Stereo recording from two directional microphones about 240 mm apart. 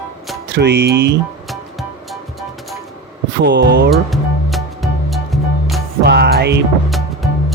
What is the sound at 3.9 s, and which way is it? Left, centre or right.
Music, centre.